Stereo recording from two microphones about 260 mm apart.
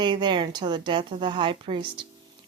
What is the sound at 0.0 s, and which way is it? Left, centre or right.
Speech, centre.